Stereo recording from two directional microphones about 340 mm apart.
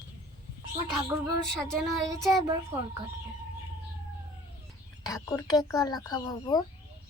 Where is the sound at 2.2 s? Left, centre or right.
Centre.